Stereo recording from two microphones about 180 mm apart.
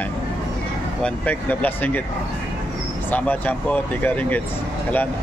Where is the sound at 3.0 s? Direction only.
10° left (ahead or behind).